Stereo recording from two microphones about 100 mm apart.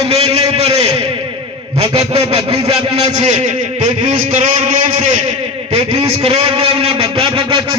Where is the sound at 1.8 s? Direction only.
80° right.